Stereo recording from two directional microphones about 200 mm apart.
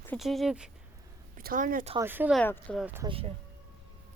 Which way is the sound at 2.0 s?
10° right (ahead or behind).